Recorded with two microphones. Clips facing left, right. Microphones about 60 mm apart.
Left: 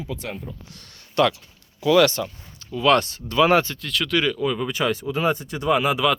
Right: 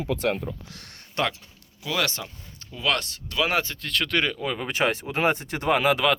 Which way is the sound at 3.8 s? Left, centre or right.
Right.